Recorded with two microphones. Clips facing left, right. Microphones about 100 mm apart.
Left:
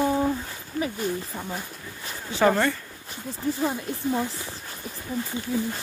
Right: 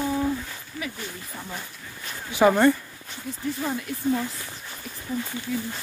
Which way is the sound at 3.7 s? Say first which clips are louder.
Right 1 dB; 25° left (ahead or behind).